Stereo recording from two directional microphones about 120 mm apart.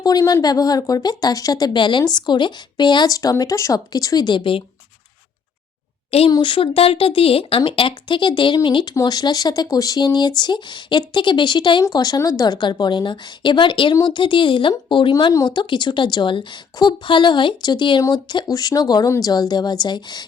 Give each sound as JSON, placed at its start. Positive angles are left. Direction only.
{"t": 0.0, "sound": "speech", "side_deg": 30}
{"t": 6.1, "sound": "a woman's voice", "side_deg": 55}
{"t": 6.3, "sound": "speech", "side_deg": 45}